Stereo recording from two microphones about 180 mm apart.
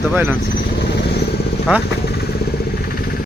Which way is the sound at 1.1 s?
65° left (ahead or behind).